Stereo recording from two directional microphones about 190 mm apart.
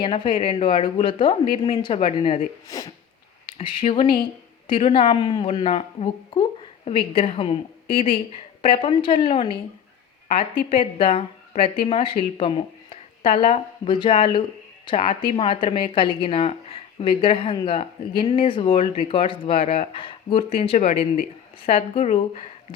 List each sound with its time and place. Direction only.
0.0 s speech: 25° left (ahead or behind)